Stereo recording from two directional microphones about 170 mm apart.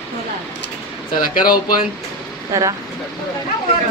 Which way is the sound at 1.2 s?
55° left (ahead or behind).